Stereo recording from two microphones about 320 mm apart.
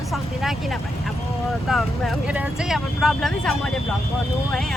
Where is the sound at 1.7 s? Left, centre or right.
Centre.